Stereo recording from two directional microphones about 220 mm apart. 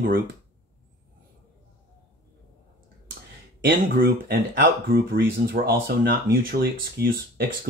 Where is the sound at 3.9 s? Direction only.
45° right (ahead or behind).